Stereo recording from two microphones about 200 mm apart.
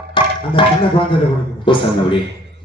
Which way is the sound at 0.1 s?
25° left (ahead or behind).